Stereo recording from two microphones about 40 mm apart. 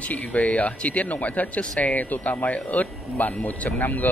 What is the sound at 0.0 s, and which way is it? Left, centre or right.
Speech, left.